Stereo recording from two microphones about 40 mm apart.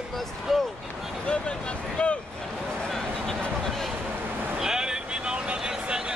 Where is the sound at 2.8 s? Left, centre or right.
Centre.